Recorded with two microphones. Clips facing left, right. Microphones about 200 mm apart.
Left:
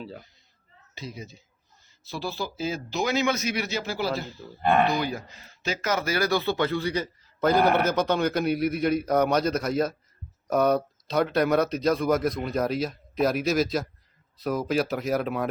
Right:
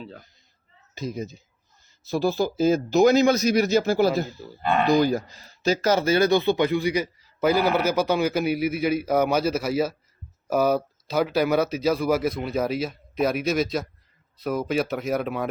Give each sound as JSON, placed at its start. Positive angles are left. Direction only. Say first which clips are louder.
{"t": 0.0, "sound": "speech", "louder": "left 1 dB", "side_deg": 5}
{"t": 0.9, "sound": "speech", "louder": "right 8 dB", "side_deg": -45}